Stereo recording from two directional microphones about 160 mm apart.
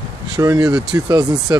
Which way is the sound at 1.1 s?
20° right (ahead or behind).